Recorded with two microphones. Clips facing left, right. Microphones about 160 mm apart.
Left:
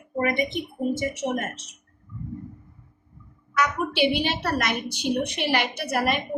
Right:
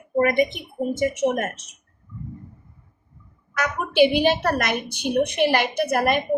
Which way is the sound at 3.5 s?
50° right (ahead or behind).